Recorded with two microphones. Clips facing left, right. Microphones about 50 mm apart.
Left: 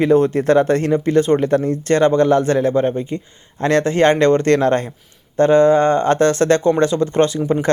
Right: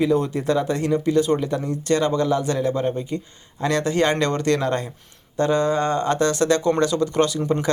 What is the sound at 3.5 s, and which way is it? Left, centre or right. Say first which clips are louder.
Speech: left 5 dB; left.